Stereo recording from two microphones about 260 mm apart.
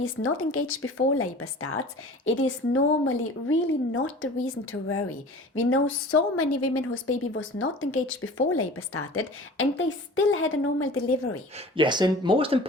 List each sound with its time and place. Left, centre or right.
0.0 s a woman's voice: left
11.5 s speech: centre